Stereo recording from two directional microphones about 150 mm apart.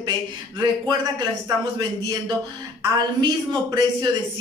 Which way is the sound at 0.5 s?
25° right (ahead or behind).